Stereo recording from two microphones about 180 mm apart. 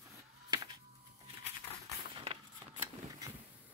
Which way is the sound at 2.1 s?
35° right (ahead or behind).